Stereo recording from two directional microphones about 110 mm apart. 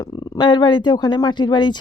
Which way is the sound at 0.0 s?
40° left (ahead or behind).